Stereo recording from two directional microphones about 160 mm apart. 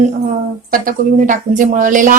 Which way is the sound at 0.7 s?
60° right (ahead or behind).